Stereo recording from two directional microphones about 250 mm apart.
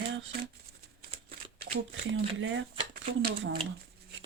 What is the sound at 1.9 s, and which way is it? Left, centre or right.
Speech, right.